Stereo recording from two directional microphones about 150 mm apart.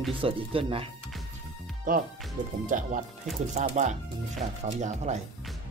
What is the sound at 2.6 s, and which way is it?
Speech, 60° right (ahead or behind).